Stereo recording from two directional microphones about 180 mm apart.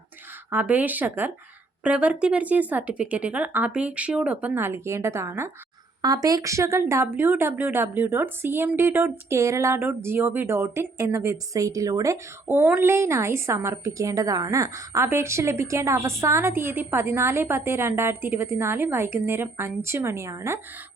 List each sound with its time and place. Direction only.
0.5 s speech: 10° right (ahead or behind)